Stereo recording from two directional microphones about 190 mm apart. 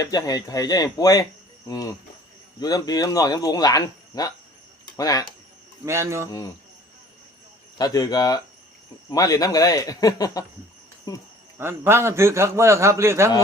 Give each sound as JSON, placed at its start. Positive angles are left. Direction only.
{"t": 0.0, "sound": "speech", "side_deg": 20}
{"t": 5.8, "sound": "a man's voice", "side_deg": -15}
{"t": 7.8, "sound": "speech", "side_deg": 20}
{"t": 11.5, "sound": "a man's voice", "side_deg": -10}